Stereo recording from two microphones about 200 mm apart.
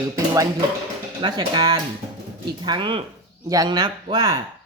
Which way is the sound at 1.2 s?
20° right (ahead or behind).